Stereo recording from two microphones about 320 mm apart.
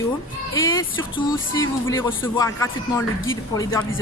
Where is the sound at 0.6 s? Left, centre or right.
Left.